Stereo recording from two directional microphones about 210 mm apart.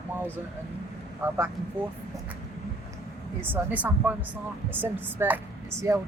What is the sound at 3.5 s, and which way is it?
Speech, 10° right (ahead or behind).